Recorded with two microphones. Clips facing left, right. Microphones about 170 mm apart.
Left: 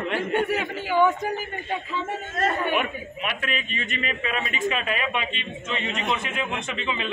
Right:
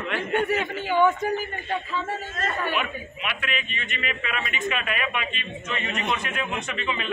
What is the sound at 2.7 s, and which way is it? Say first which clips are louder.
A man's voice: left 3 dB; 45° left (ahead or behind).